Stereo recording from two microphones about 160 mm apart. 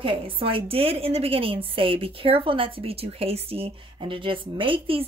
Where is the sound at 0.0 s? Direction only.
35° right (ahead or behind).